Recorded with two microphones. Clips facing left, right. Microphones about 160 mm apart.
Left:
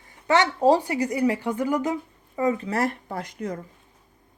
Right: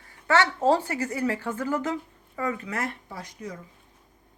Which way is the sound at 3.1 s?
55° left (ahead or behind).